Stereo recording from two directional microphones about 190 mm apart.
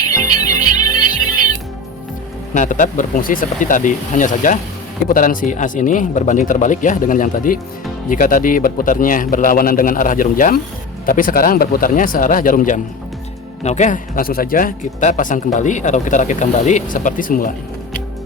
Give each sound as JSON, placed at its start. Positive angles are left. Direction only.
{"t": 0.0, "sound": "music", "side_deg": 20}
{"t": 2.5, "sound": "a man's voice", "side_deg": 40}